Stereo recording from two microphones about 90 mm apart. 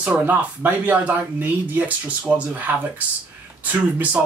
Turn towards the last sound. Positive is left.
turn(degrees=-20)  # may be behind; listen again after turning